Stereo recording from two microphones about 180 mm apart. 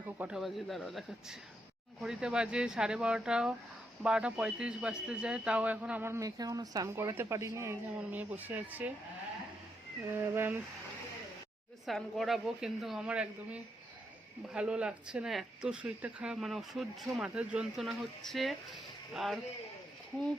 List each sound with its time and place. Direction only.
0.2 s speech: 5° right (ahead or behind)
10.1 s speech: 10° right (ahead or behind)
11.9 s speech: centre (ahead or behind)